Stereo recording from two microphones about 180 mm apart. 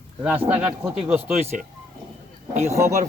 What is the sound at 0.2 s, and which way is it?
Speech, 10° right (ahead or behind).